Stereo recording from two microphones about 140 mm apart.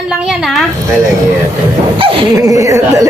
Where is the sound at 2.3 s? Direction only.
25° right (ahead or behind).